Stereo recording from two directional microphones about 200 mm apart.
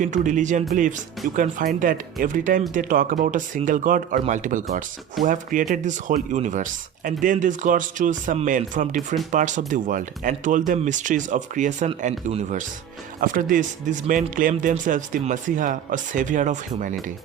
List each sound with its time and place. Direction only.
0.0 s speech: 40° right (ahead or behind)